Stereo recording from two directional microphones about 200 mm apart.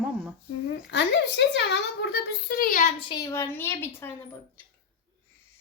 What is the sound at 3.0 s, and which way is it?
A woman's voice, 20° left (ahead or behind).